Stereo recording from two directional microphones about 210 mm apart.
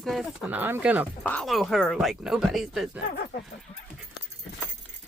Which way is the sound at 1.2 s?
5° left (ahead or behind).